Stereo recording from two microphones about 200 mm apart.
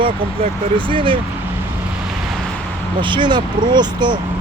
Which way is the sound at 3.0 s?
25° right (ahead or behind).